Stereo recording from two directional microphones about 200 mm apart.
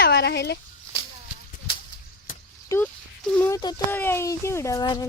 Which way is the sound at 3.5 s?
15° left (ahead or behind).